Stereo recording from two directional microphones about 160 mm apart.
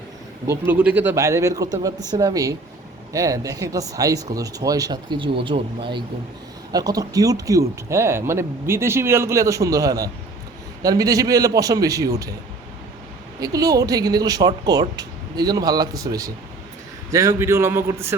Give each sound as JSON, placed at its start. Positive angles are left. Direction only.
{"t": 0.4, "sound": "speech", "side_deg": -15}
{"t": 13.4, "sound": "speech", "side_deg": -20}